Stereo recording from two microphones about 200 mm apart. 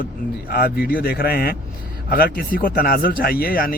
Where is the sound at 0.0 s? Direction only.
50° left (ahead or behind).